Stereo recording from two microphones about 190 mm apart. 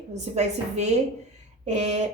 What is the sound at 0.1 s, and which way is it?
Speech, 35° right (ahead or behind).